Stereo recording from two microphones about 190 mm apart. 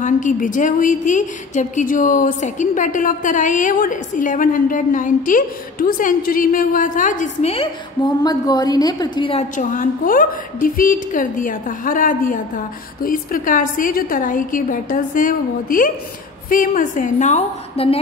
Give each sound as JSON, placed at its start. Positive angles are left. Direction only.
{"t": 0.0, "sound": "a woman's voice", "side_deg": 45}